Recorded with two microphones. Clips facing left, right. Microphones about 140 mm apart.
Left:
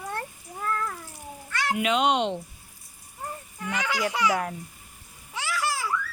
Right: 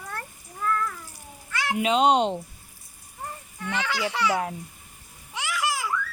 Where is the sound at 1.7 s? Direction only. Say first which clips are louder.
Right 4 dB; 35° right (ahead or behind).